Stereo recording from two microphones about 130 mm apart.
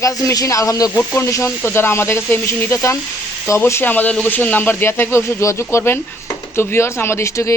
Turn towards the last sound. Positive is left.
turn(degrees=20)  # may be behind; listen again after turning